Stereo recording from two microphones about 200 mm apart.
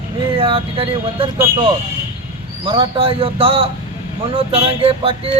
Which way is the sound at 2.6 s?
25° right (ahead or behind).